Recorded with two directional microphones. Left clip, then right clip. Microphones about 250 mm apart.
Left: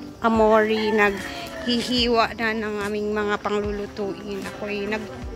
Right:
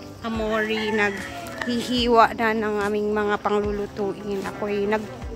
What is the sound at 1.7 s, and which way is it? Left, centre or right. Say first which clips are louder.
Speech: right 1 dB; centre.